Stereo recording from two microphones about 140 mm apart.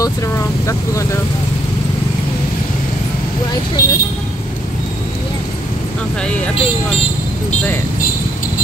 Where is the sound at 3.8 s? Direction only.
90° left.